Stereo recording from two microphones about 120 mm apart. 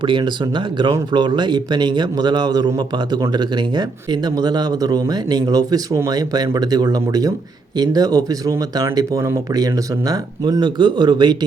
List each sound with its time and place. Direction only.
0.0 s a man's voice: 40° right (ahead or behind)